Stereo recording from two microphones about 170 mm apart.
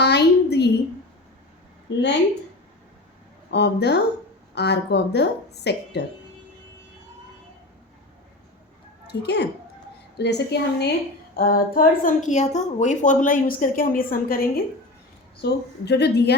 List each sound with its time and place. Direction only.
0.0 s a sound: 80° left
1.9 s a woman's voice: 90° left
3.5 s a woman's voice: 85° left
9.0 s a woman's voice: 80° left
11.3 s a woman's voice: 55° left (ahead or behind)
15.4 s a woman's voice: 75° left (ahead or behind)